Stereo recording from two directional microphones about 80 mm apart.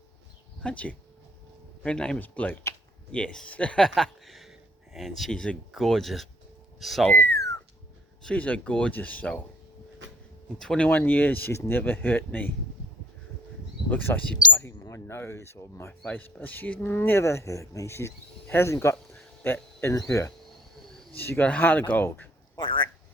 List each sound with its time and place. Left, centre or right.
0.6 s speech: centre
3.8 s speech: centre
7.2 s a sound: left
8.2 s speech: centre
10.6 s speech: centre
10.8 s speech: left
13.9 s speech: left
14.7 s speech: left
16.0 s speech: left
20.0 s speech: left
21.2 s speech: left
22.5 s a sound: left